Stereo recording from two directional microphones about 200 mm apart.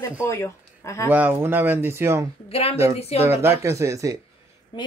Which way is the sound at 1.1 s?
10° right (ahead or behind).